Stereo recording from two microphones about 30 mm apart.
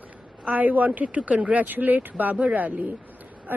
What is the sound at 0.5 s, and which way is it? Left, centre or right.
A woman's voice, right.